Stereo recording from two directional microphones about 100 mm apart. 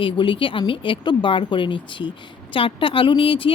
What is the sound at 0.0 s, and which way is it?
Speech, 60° left (ahead or behind).